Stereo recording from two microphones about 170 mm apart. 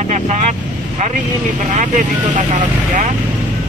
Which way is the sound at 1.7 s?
45° right (ahead or behind).